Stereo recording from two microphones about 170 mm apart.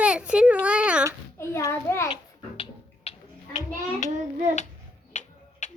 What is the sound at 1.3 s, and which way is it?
Speech, 15° left (ahead or behind).